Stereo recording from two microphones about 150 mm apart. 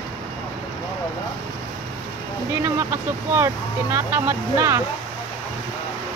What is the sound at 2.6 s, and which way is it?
Speech, 15° right (ahead or behind).